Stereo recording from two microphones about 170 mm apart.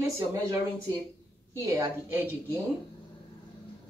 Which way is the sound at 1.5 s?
15° right (ahead or behind).